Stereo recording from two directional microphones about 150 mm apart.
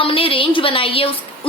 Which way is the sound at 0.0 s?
35° left (ahead or behind).